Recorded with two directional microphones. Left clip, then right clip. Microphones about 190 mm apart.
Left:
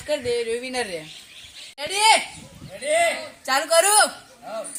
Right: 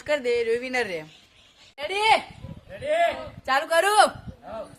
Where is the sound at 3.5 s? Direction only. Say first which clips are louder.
Left 2 dB; 35° right (ahead or behind).